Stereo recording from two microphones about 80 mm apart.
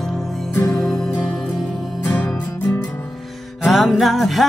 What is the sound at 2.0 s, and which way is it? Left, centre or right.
Music, left.